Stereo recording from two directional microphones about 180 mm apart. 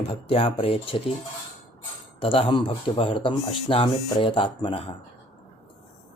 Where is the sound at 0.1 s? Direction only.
30° left (ahead or behind).